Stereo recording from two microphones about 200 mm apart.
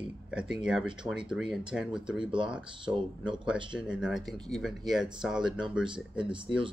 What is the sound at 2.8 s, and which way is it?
Speech, 25° right (ahead or behind).